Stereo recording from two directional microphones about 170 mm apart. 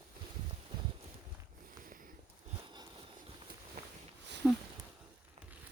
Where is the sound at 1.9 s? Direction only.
55° right (ahead or behind).